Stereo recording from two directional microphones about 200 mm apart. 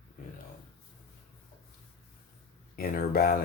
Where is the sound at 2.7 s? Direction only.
45° left (ahead or behind).